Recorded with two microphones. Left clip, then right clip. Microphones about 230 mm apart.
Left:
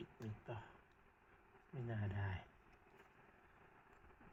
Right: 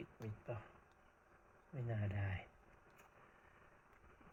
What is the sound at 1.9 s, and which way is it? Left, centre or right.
Speech, centre.